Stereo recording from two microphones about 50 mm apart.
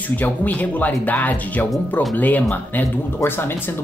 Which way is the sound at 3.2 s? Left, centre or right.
Left.